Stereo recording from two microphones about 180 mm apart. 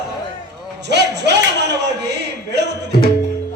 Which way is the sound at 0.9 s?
70° right (ahead or behind).